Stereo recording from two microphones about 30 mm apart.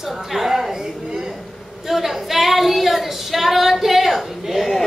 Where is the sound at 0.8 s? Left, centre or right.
Centre.